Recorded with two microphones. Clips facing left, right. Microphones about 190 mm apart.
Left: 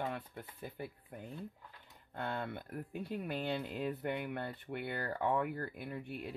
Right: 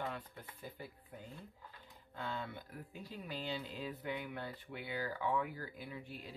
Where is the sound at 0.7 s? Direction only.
60° left (ahead or behind).